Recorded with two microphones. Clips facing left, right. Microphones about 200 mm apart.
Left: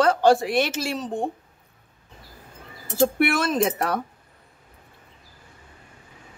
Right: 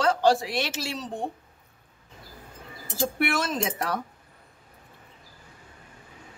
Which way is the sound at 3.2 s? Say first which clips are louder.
Left 5 dB; 60° left (ahead or behind).